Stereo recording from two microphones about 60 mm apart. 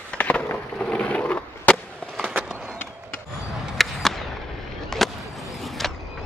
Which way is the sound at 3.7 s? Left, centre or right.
Centre.